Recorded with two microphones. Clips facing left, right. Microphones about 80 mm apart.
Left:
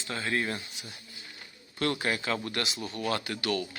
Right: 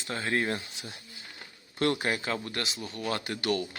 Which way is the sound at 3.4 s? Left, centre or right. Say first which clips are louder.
Right 2 dB; right.